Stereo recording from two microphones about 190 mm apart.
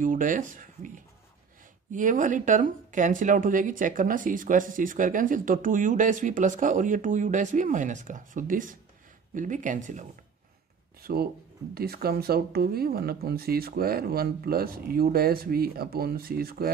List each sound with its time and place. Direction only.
0.0 s speech: 45° right (ahead or behind)
11.0 s a sound: 55° right (ahead or behind)
11.7 s speech: 55° right (ahead or behind)